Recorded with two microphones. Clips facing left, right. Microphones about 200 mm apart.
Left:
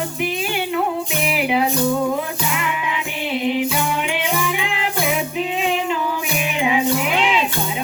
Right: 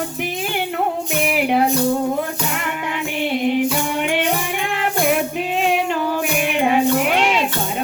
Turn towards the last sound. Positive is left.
turn(degrees=-50)  # may be behind; listen again after turning